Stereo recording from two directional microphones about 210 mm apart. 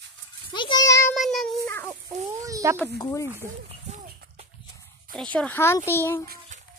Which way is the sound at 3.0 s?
15° left (ahead or behind).